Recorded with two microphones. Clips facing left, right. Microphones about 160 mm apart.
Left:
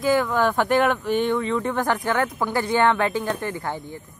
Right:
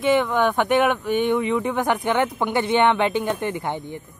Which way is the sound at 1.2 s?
15° right (ahead or behind).